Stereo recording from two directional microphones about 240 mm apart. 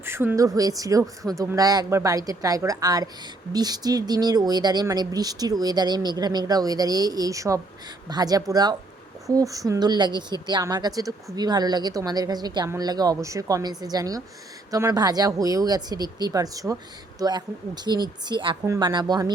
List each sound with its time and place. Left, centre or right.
0.0 s speech: centre